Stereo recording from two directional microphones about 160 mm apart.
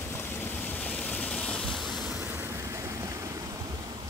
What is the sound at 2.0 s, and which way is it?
Vehicle, 15° right (ahead or behind).